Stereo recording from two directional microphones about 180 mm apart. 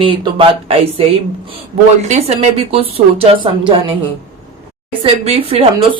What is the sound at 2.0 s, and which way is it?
A woman's voice, 35° right (ahead or behind).